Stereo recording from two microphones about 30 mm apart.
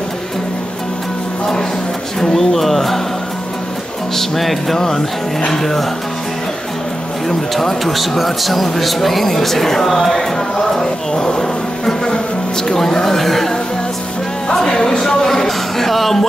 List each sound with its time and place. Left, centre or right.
2.1 s speech: centre
4.1 s speech: centre
7.2 s speech: centre